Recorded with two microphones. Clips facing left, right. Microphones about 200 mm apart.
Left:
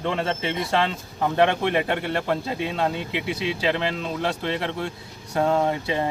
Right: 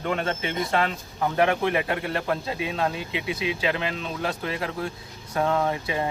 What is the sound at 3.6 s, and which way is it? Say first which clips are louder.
Speech: left 3 dB; 35° left (ahead or behind).